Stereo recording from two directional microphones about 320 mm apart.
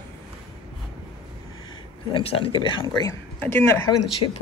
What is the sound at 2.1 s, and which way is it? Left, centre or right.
Speech, centre.